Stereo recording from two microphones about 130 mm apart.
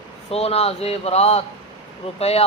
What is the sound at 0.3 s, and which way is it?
Speech, 50° left (ahead or behind).